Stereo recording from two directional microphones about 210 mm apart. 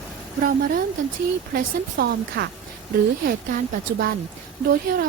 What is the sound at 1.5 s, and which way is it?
Speech, 45° right (ahead or behind).